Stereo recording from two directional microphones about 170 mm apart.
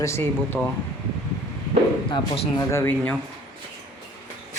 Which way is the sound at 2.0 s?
30° left (ahead or behind).